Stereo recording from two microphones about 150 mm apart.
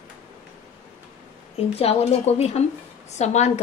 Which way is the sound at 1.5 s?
40° left (ahead or behind).